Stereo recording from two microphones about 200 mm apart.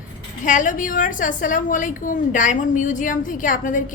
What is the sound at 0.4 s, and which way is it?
A woman's voice, 40° left (ahead or behind).